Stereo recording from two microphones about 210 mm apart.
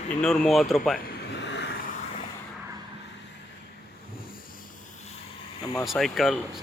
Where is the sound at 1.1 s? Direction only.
55° left (ahead or behind).